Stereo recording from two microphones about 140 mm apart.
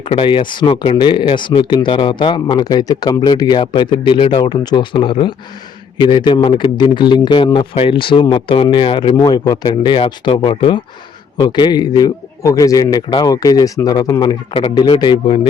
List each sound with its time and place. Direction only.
0.0 s a man's voice: 40° left (ahead or behind)